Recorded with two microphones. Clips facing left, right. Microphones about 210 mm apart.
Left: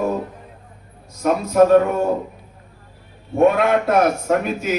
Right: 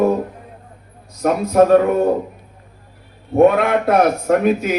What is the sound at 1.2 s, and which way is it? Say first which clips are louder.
Speech: right 1 dB; 55° right (ahead or behind).